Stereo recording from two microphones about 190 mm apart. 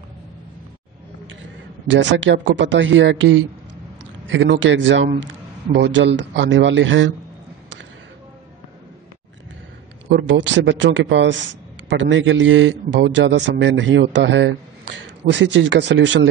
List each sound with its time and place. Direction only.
1.9 s a man's voice: 75° right (ahead or behind)
10.1 s a man's voice: 75° right (ahead or behind)